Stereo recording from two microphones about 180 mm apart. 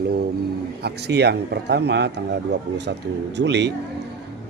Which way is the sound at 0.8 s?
65° right (ahead or behind).